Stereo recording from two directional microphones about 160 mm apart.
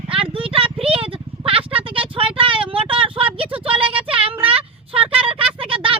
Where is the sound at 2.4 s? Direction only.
35° right (ahead or behind).